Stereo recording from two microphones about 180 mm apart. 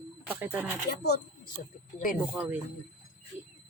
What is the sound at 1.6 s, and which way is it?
Speech, 50° left (ahead or behind).